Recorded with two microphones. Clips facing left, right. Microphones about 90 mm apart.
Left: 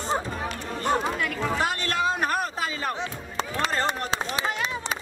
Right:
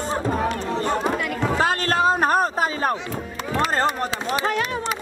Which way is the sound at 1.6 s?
35° right (ahead or behind).